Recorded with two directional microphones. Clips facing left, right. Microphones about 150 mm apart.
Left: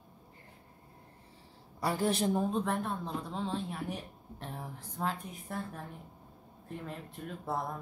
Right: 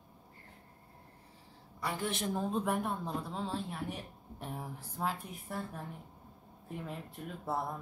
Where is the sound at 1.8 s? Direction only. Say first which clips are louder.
Left 6 dB; 35° left (ahead or behind).